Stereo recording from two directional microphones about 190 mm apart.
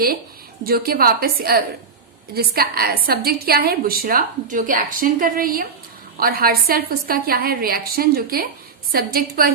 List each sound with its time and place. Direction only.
0.6 s a woman's voice: 50° right (ahead or behind)